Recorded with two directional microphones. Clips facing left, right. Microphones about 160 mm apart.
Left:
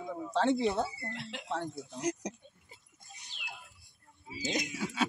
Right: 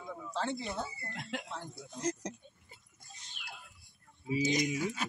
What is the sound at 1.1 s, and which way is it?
Speech, 45° right (ahead or behind).